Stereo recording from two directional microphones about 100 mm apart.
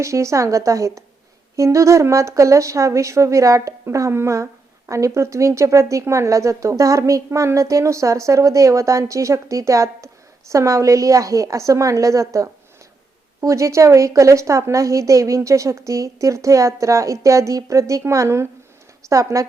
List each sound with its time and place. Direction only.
0.0 s a woman's voice: 30° right (ahead or behind)